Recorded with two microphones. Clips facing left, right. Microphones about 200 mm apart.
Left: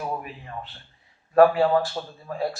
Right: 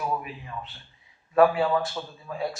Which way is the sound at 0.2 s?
45° left (ahead or behind).